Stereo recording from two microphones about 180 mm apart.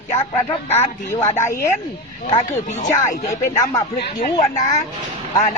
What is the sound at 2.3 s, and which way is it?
Speech, 40° left (ahead or behind).